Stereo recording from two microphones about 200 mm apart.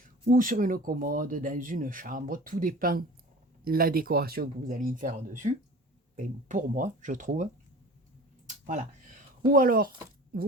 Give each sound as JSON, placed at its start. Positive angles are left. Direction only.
{"t": 0.3, "sound": "speech", "side_deg": -40}
{"t": 9.5, "sound": "speech", "side_deg": -45}